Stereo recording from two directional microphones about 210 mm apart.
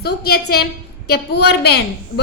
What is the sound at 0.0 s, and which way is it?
A woman's voice, 50° left (ahead or behind).